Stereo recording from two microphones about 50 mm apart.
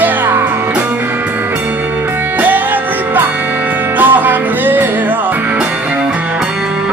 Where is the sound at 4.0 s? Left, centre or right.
Right.